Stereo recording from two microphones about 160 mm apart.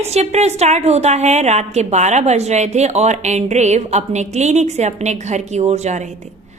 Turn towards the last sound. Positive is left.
turn(degrees=-45)  # may be behind; listen again after turning